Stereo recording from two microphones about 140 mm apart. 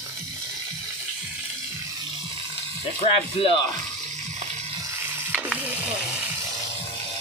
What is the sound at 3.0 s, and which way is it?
Speech, 40° left (ahead or behind).